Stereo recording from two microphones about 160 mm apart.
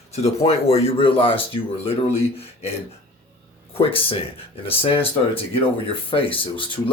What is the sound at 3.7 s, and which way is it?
Speech, 35° left (ahead or behind).